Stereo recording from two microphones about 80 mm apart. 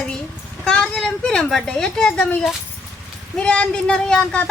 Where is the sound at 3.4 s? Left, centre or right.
Centre.